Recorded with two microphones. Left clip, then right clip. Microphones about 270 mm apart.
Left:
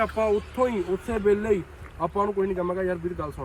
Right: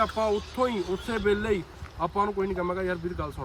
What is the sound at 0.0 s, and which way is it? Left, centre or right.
Speech, centre.